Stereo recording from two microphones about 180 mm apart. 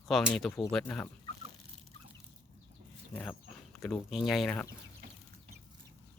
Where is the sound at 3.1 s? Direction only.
5° left (ahead or behind).